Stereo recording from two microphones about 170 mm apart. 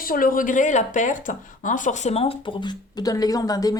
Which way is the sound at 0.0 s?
55° left (ahead or behind).